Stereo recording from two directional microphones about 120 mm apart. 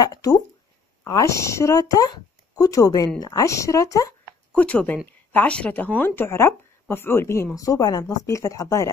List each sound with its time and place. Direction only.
0.0 s speech: 30° left (ahead or behind)
4.5 s a woman's voice: 10° left (ahead or behind); by 8.9 s 25° left (ahead or behind)